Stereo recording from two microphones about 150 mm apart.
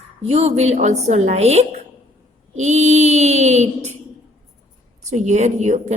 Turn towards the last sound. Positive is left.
turn(degrees=-50)  # may be behind; listen again after turning